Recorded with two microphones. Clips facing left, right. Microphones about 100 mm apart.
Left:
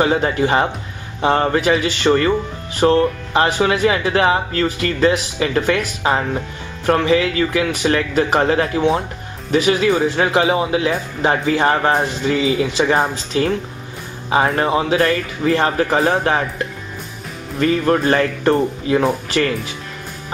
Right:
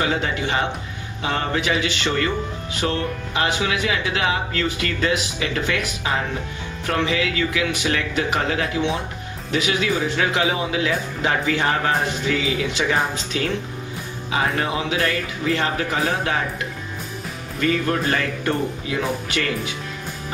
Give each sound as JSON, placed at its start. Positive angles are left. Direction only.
{"t": 0.0, "sound": "speech", "side_deg": 40}
{"t": 17.6, "sound": "speech", "side_deg": 35}